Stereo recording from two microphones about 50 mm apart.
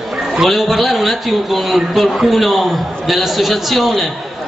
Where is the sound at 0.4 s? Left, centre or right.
Centre.